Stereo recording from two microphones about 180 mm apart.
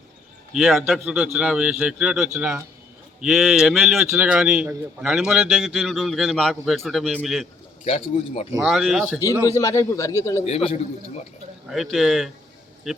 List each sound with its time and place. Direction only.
0.5 s a man's voice: centre (ahead or behind)
7.9 s a man's voice: 30° left (ahead or behind)
8.6 s a man's voice: centre (ahead or behind)
9.4 s a man's voice: 15° left (ahead or behind)
10.4 s a man's voice: 35° left (ahead or behind)
11.7 s a man's voice: centre (ahead or behind)